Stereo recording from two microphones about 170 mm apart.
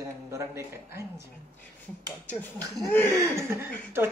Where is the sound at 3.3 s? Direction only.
15° right (ahead or behind).